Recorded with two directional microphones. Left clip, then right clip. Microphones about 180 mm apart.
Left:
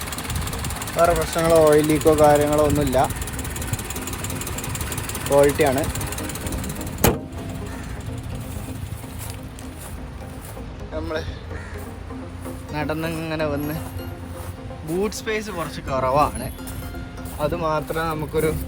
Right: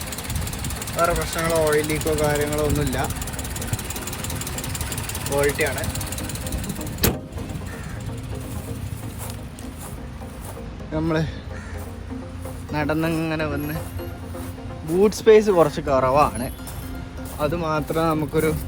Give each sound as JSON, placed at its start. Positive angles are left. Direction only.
{"t": 0.9, "sound": "speech", "side_deg": 15}
{"t": 5.4, "sound": "speech", "side_deg": 15}
{"t": 10.9, "sound": "music", "side_deg": -30}
{"t": 12.7, "sound": "speech", "side_deg": 0}
{"t": 14.9, "sound": "speech", "side_deg": -5}
{"t": 15.9, "sound": "speech", "side_deg": 0}